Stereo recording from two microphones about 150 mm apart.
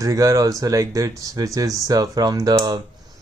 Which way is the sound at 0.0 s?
20° right (ahead or behind).